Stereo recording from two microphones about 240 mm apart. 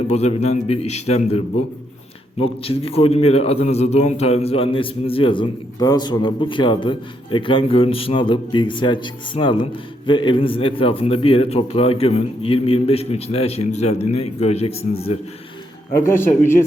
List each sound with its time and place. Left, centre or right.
0.1 s a man's voice: left
2.4 s a man's voice: left
15.9 s speech: centre